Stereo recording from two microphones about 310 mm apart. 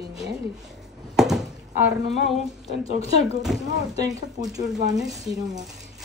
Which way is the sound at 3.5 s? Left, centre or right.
Centre.